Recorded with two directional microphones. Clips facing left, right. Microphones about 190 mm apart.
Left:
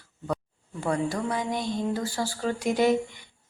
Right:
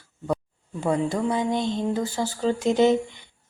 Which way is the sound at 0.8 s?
20° right (ahead or behind).